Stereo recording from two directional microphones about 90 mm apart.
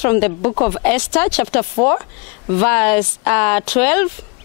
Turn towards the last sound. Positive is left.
turn(degrees=15)  # may be behind; listen again after turning